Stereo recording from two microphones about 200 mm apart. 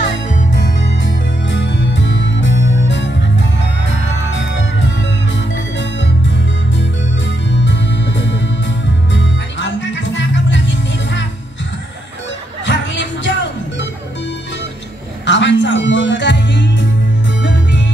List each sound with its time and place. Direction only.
1.0 s music: 65° left (ahead or behind)
5.8 s music: 65° left (ahead or behind)
12.6 s music: 65° left (ahead or behind)
15.2 s music: 65° left (ahead or behind)